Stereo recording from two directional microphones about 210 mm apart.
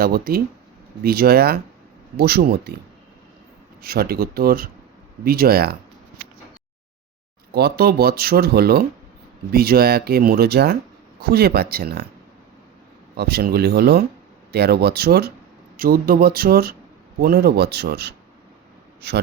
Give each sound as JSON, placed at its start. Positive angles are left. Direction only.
{"t": 0.0, "sound": "speech", "side_deg": -45}
{"t": 3.8, "sound": "speech", "side_deg": -45}
{"t": 7.5, "sound": "speech", "side_deg": -45}
{"t": 13.1, "sound": "speech", "side_deg": -50}